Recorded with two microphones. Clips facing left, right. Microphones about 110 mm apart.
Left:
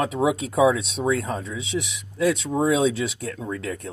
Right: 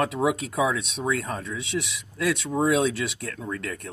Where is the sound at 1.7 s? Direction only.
10° left (ahead or behind).